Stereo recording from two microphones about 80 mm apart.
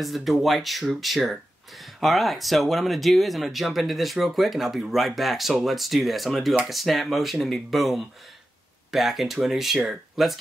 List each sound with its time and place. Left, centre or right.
0.0 s speech: centre